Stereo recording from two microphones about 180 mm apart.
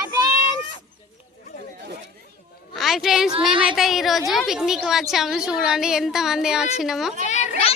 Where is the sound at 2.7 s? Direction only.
Centre (ahead or behind).